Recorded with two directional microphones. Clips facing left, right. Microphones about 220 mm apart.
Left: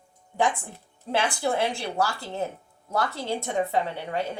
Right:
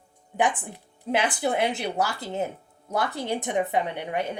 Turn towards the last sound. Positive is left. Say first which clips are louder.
# right 1 dB
turn(degrees=-15)  # may be behind; listen again after turning